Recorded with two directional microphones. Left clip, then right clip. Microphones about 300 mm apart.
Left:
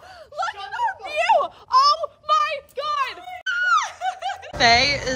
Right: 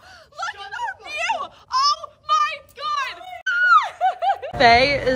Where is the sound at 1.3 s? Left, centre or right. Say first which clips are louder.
Left 8 dB; centre.